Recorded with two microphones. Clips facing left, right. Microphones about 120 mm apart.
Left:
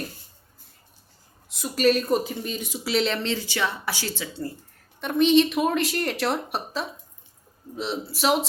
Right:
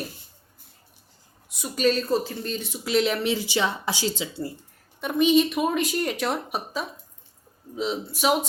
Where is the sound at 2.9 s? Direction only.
5° right (ahead or behind).